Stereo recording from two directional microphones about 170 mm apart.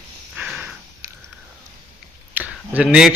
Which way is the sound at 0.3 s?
5° right (ahead or behind).